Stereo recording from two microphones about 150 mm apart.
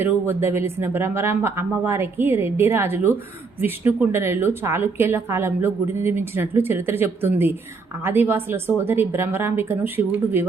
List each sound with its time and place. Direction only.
0.0 s a woman's voice: 15° right (ahead or behind)